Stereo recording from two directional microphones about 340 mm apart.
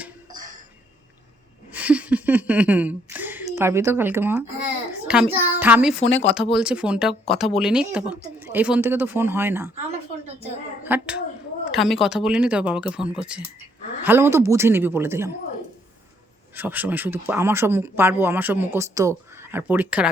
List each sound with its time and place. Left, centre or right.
1.7 s a child's voice: centre
6.1 s speech: left
6.3 s speech: centre
10.8 s a woman's voice: centre
16.6 s speech: centre